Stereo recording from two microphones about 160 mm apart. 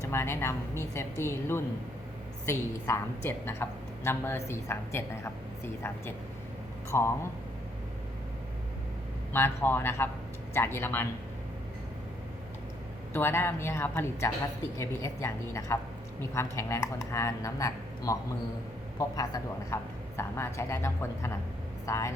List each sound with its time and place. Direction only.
0.0 s a woman's voice: 15° left (ahead or behind)
9.3 s a woman's voice: 15° left (ahead or behind)
13.1 s a woman's voice: 15° left (ahead or behind)